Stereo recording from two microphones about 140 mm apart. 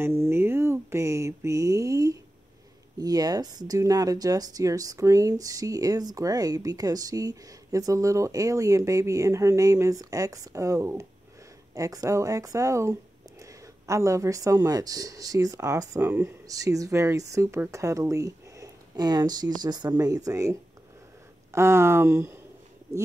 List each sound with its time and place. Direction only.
0.0 s mantra: 15° right (ahead or behind)
3.0 s speech: 25° right (ahead or behind)